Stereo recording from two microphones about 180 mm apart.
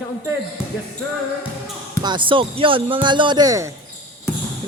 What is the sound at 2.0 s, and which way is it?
Music, 25° right (ahead or behind).